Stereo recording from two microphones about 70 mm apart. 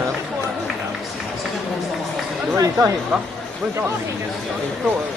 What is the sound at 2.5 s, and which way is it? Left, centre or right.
Speech, right.